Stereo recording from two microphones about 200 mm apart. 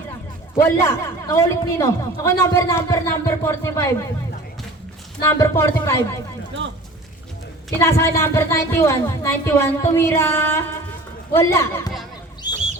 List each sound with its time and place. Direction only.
0.5 s a man's voice: 15° left (ahead or behind)
5.2 s a man's voice: 15° left (ahead or behind)
7.8 s a man's voice: 15° left (ahead or behind)
12.4 s chicken: 40° right (ahead or behind)